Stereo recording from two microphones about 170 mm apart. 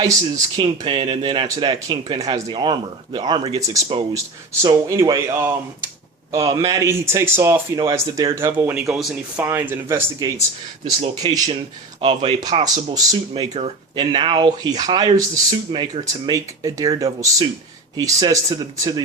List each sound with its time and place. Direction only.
0.0 s speech: 20° right (ahead or behind)
3.6 s speech: 20° right (ahead or behind)
13.5 s speech: 35° right (ahead or behind)